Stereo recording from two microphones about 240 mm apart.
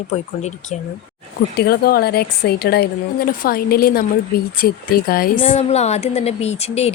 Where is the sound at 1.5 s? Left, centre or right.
Left.